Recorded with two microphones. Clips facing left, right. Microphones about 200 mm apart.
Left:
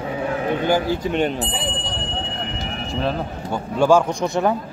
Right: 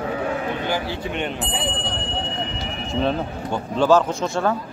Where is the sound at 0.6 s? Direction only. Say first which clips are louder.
Left 6 dB; 45° left (ahead or behind).